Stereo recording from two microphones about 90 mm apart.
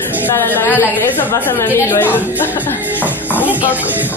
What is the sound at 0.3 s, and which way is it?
A woman's voice, 30° left (ahead or behind).